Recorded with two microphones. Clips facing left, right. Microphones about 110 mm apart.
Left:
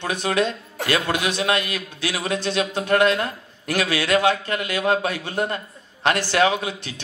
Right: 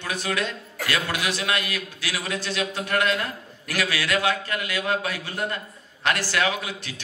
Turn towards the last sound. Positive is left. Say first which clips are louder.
# left 4 dB
turn(degrees=25)  # may be behind; listen again after turning